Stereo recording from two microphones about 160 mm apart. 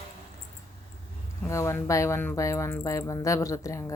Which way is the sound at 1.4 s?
20° left (ahead or behind).